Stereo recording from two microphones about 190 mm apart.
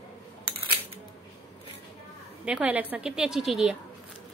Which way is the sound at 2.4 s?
5° right (ahead or behind).